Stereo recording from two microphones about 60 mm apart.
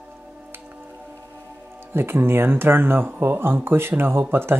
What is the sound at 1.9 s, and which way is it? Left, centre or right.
Speech, right.